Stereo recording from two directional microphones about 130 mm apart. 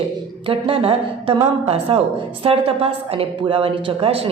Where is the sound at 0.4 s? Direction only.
45° right (ahead or behind).